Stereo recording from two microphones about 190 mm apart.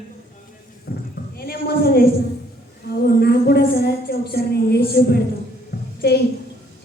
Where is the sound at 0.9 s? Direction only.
55° left (ahead or behind).